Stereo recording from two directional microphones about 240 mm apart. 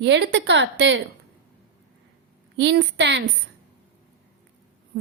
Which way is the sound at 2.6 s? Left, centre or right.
Right.